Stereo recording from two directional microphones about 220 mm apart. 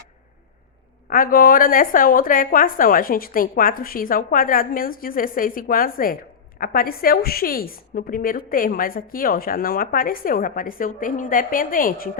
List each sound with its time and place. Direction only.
1.1 s a woman's voice: 40° left (ahead or behind)